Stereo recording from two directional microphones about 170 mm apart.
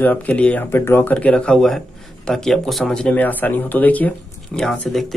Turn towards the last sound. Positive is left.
turn(degrees=5)  # may be behind; listen again after turning